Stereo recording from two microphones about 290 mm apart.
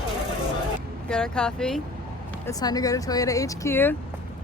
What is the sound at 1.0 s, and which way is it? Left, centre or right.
Speech, centre.